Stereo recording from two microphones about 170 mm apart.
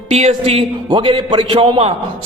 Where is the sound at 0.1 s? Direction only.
40° right (ahead or behind).